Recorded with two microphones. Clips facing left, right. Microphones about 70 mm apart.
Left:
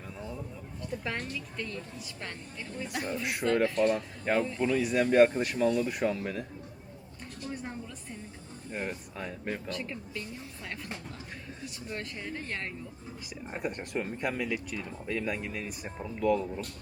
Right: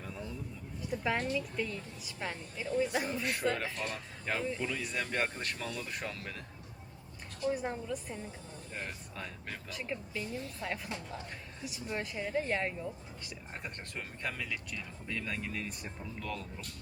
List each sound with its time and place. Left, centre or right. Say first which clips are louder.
0.1 s a sound: left 3 dB; centre
0.8 s a woman's voice: right 2 dB; centre
7.4 s speech: right 6 dB; centre
8.7 s speech: left 7 dB; centre
9.6 s speech: left 3 dB; centre
13.5 s speech: left 11 dB; centre